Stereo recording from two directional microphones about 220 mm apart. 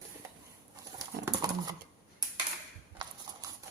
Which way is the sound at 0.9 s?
15° right (ahead or behind).